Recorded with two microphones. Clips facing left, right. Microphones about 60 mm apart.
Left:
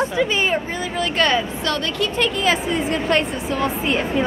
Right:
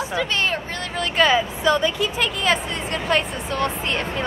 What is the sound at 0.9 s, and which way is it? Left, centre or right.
Speech, centre.